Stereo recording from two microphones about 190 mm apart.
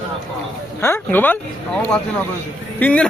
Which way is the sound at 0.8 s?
10° left (ahead or behind).